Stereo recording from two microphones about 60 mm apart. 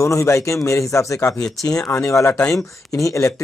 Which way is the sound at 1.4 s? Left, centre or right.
Left.